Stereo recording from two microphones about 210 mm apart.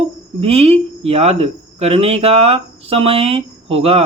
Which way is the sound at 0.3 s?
30° right (ahead or behind).